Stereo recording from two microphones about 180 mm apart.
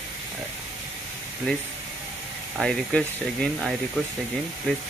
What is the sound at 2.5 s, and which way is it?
Speech, 5° left (ahead or behind).